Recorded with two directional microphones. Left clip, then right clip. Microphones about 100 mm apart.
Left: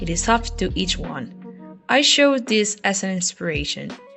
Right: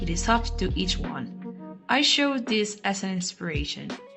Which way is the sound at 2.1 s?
40° left (ahead or behind).